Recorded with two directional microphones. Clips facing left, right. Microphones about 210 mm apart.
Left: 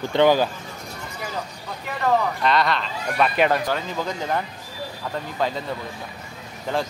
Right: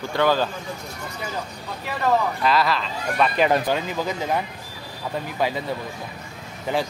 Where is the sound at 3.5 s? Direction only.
20° right (ahead or behind).